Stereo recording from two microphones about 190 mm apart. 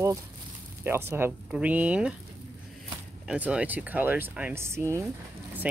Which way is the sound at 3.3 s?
5° right (ahead or behind).